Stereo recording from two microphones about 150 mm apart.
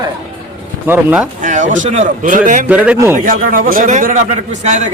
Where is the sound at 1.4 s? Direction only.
55° right (ahead or behind).